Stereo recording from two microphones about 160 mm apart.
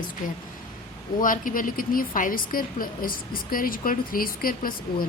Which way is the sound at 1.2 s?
60° left (ahead or behind).